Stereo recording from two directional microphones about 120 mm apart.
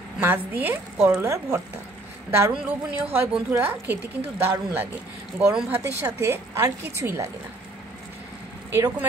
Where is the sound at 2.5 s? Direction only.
10° right (ahead or behind).